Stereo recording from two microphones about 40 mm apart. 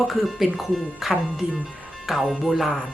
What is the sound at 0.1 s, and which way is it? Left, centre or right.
Speech, centre.